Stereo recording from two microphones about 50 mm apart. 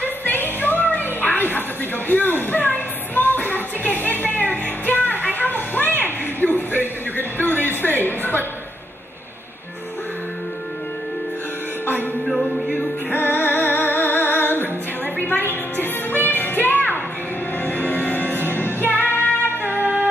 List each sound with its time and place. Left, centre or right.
0.0 s music: left
5.0 s a sound: left
6.4 s music: left
7.2 s a sound: left
11.8 s music: left
12.3 s music: centre
13.1 s music: left